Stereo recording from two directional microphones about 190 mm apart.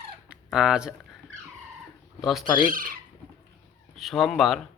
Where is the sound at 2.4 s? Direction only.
45° right (ahead or behind).